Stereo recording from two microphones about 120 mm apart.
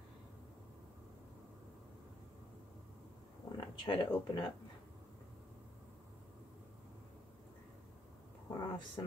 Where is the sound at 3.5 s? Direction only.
45° left (ahead or behind).